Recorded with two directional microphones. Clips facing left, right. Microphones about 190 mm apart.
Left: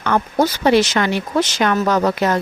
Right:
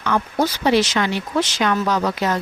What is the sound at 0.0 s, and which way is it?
Speech, 55° left (ahead or behind).